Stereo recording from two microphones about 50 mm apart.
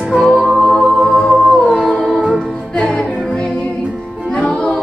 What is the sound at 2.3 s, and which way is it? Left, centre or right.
Music, left.